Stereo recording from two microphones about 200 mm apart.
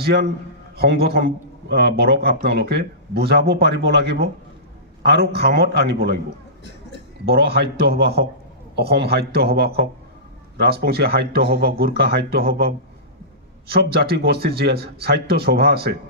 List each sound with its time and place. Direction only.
0.0 s a man's voice: 55° right (ahead or behind)
7.2 s a man's voice: 55° right (ahead or behind)